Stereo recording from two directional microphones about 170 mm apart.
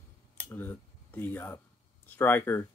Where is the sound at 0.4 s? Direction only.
10° left (ahead or behind).